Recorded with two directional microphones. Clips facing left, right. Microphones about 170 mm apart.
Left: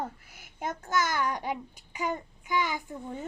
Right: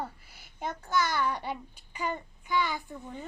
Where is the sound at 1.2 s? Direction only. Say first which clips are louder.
Left 1 dB; 15° left (ahead or behind).